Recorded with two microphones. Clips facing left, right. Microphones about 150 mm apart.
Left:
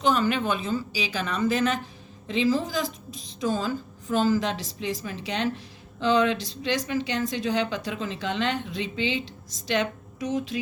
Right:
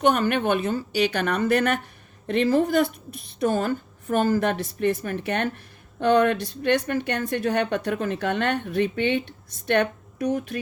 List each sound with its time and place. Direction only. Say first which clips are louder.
0.0 s a woman's voice: right 3 dB; 60° right (ahead or behind)